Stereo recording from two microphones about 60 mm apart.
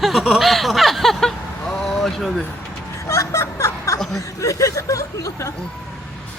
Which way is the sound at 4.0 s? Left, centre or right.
Centre.